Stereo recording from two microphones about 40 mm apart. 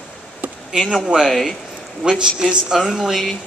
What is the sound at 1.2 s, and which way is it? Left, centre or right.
Speech, centre.